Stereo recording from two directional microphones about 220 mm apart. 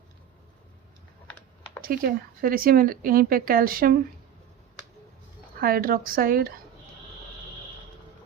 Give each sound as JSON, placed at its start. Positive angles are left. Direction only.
{"t": 1.8, "sound": "speech", "side_deg": -40}
{"t": 5.5, "sound": "speech", "side_deg": -40}